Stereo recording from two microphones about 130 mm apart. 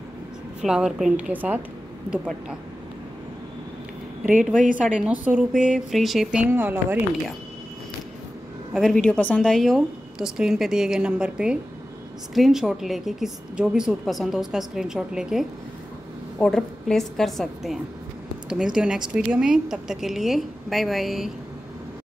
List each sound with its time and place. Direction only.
0.6 s a woman's voice: 5° right (ahead or behind)
4.7 s speech: 10° right (ahead or behind)
6.4 s speech: 15° right (ahead or behind)
8.7 s a woman's voice: 5° left (ahead or behind)